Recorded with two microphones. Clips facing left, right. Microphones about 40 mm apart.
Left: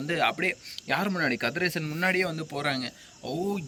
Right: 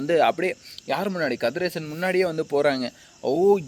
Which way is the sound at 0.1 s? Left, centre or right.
Left.